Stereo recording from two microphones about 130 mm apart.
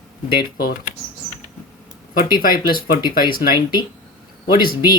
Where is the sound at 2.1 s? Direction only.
90° left.